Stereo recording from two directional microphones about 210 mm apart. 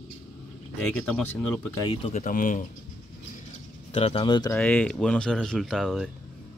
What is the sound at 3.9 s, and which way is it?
Speech, 30° left (ahead or behind).